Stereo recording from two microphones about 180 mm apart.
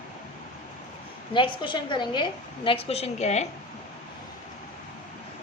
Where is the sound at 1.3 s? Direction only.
25° left (ahead or behind).